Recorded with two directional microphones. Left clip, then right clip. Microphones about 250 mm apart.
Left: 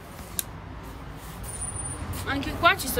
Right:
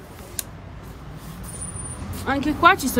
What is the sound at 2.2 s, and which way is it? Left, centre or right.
Speech, centre.